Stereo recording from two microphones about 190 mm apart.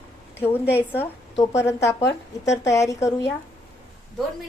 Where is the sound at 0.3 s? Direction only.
10° left (ahead or behind).